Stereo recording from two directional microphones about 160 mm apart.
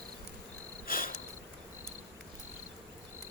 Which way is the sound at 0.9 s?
60° left (ahead or behind).